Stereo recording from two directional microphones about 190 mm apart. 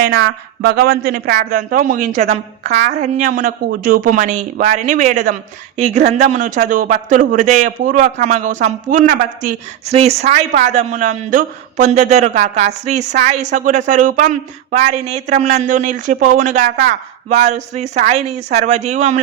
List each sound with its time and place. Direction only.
0.0 s speech: 60° right (ahead or behind); by 19.2 s 35° right (ahead or behind)